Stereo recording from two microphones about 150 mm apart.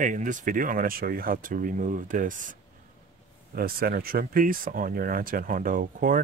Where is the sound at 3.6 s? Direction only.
80° right.